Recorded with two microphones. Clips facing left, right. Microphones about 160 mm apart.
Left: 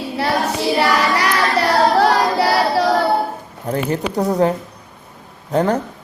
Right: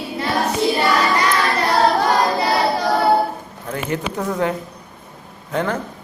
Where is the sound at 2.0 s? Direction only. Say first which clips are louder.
Left 3 dB; 75° left (ahead or behind).